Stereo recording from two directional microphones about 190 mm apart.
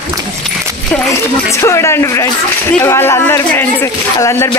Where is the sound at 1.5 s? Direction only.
15° left (ahead or behind).